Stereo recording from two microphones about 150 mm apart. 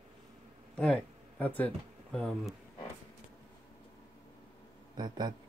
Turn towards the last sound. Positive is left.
turn(degrees=-30)  # may be behind; listen again after turning